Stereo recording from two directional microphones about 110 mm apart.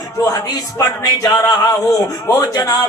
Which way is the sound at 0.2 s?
35° left (ahead or behind).